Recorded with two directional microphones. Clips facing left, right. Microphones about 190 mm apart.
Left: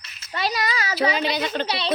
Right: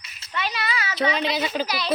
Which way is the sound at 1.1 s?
Centre (ahead or behind).